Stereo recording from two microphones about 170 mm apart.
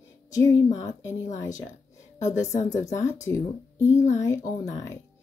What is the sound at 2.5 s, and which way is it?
Speech, 45° left (ahead or behind).